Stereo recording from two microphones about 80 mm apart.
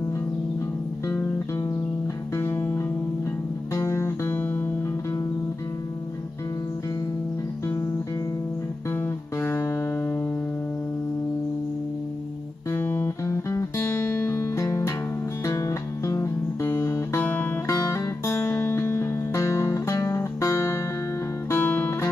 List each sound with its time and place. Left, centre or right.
2.3 s music: left
8.9 s music: left
12.7 s music: left
13.2 s music: left
21.5 s music: left